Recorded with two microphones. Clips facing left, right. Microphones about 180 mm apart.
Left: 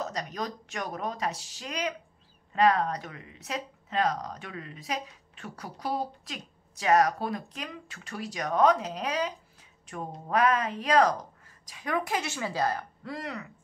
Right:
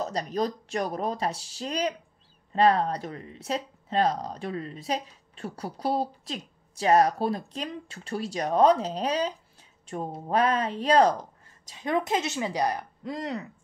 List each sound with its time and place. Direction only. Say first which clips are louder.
0.0 s a woman's voice: right 6 dB; 30° right (ahead or behind)